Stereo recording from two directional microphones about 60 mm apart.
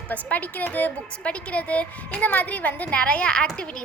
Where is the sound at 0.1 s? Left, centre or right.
Left.